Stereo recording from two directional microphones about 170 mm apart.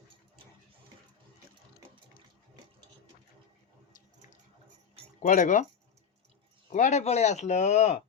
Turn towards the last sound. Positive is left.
turn(degrees=40)  # may be behind; listen again after turning